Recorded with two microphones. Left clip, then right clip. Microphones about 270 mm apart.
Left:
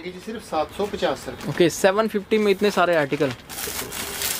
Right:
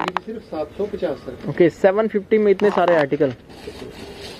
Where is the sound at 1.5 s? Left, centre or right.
Centre.